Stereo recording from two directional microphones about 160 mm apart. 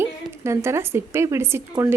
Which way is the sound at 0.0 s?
15° right (ahead or behind).